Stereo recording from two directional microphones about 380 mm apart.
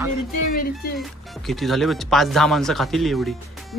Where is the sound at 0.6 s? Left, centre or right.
Left.